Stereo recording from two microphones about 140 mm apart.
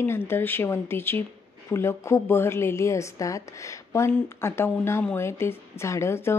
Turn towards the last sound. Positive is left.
turn(degrees=20)  # may be behind; listen again after turning